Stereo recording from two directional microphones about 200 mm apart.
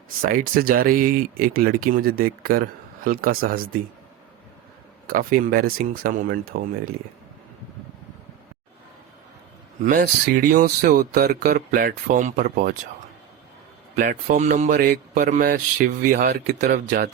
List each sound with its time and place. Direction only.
0.2 s speech: 45° right (ahead or behind)
5.0 s speech: 45° right (ahead or behind)
9.8 s speech: 45° right (ahead or behind)
13.9 s speech: 40° right (ahead or behind)